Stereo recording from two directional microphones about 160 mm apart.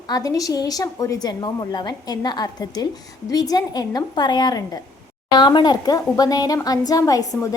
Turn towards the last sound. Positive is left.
turn(degrees=20)  # may be behind; listen again after turning